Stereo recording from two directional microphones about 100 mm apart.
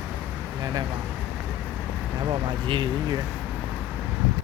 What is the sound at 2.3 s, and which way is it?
Speech, 50° right (ahead or behind).